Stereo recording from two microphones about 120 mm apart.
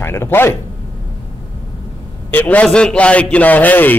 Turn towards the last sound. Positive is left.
turn(degrees=15)  # may be behind; listen again after turning